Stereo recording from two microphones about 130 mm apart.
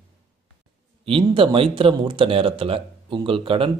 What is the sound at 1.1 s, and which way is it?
Speech, 40° right (ahead or behind).